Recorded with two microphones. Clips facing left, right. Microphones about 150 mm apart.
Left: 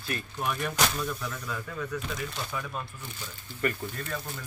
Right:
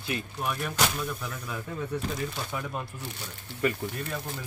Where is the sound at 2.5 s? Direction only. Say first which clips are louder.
Right 1 dB; 20° right (ahead or behind).